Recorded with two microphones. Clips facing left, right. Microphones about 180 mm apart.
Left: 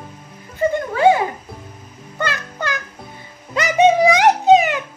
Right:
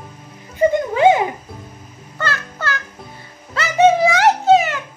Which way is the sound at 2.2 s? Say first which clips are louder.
Left 1 dB; 15° left (ahead or behind).